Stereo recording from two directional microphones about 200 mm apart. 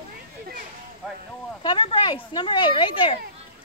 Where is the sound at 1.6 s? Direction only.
25° left (ahead or behind).